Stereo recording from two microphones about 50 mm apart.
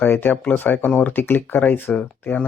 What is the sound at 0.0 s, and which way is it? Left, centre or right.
Speech, left.